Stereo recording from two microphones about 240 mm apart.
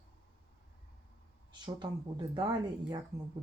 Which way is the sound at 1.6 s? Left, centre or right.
Centre.